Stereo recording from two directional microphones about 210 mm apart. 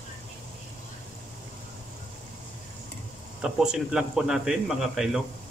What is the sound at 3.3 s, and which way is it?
A man's voice, 5° right (ahead or behind).